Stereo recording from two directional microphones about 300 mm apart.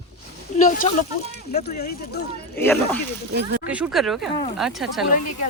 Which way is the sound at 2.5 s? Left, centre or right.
Centre.